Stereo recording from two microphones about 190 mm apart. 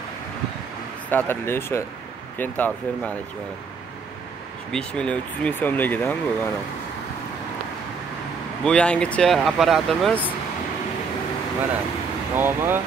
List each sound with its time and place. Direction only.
1.1 s speech: 10° left (ahead or behind)
4.7 s speech: 5° left (ahead or behind)
8.6 s speech: 5° left (ahead or behind)
12.4 s speech: 10° right (ahead or behind)